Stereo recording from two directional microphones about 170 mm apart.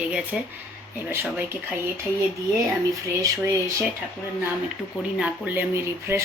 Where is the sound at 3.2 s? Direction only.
15° right (ahead or behind).